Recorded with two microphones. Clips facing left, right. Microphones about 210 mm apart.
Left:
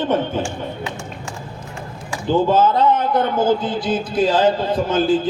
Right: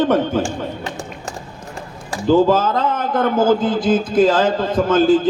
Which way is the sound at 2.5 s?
90° right.